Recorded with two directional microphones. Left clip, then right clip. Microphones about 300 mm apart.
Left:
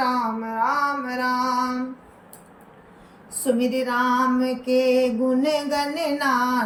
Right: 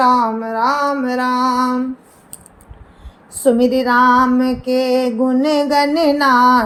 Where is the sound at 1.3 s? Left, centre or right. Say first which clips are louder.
Right 6 dB; right.